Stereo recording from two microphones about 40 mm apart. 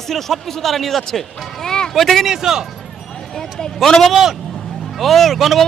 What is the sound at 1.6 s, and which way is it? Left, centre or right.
Music, centre.